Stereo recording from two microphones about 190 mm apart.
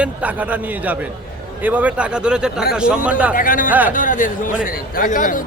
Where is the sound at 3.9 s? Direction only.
45° left (ahead or behind).